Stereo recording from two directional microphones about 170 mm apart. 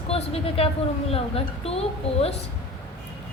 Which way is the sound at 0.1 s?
35° left (ahead or behind).